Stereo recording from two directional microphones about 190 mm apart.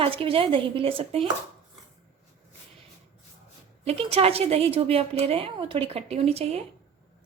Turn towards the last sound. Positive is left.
turn(degrees=-30)  # may be behind; listen again after turning